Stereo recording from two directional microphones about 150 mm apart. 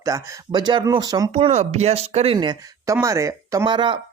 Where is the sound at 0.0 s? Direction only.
25° right (ahead or behind).